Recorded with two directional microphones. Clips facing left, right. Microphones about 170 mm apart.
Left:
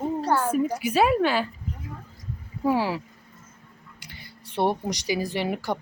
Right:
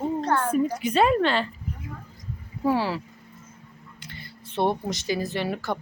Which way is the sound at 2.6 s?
10° left (ahead or behind).